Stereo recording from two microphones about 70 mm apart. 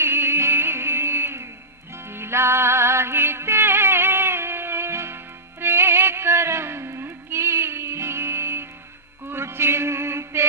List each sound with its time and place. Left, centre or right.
0.0 s music: right